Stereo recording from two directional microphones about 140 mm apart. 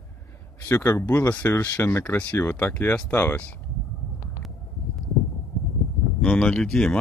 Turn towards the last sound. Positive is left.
turn(degrees=5)  # may be behind; listen again after turning